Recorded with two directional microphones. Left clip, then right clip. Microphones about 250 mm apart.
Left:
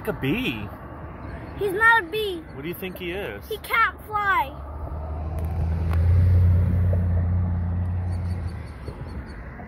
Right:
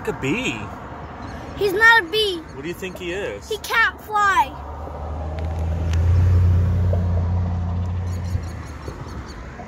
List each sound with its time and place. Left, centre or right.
0.0 s speech: centre
1.6 s speech: centre
2.6 s speech: centre
3.4 s speech: centre